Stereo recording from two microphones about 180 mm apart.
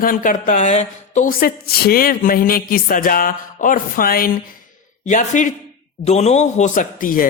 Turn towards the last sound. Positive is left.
turn(degrees=50)  # may be behind; listen again after turning